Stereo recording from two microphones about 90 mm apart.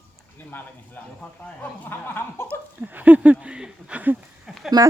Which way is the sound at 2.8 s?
20° right (ahead or behind).